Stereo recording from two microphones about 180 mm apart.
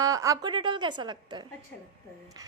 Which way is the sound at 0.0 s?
20° right (ahead or behind).